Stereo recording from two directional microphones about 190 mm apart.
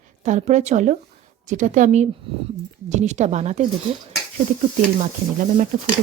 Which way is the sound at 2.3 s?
30° right (ahead or behind).